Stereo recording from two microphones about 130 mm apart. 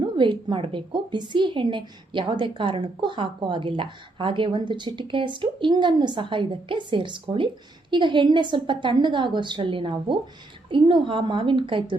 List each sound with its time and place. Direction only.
0.0 s a woman's voice: 40° right (ahead or behind)